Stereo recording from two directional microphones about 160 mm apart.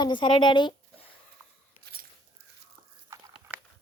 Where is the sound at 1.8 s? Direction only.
75° right (ahead or behind).